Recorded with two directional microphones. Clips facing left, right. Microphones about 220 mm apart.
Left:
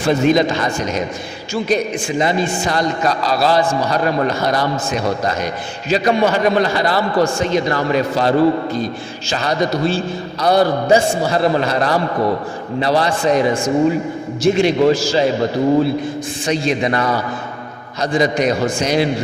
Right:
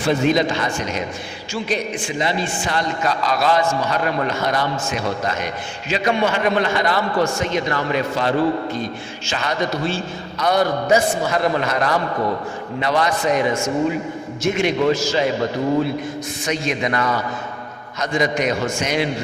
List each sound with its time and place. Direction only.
0.1 s a man's voice: 40° left (ahead or behind)